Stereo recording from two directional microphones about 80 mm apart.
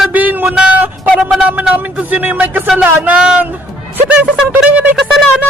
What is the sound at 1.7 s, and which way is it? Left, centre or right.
Speech, centre.